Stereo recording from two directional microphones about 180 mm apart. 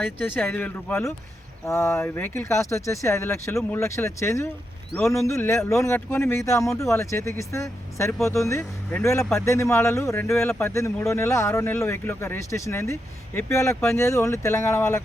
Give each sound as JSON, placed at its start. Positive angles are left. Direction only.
{"t": 0.2, "sound": "speech", "side_deg": 10}